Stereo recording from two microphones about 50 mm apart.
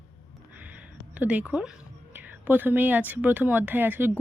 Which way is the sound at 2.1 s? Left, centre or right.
Right.